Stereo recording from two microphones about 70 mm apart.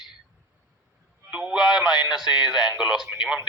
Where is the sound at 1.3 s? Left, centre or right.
Centre.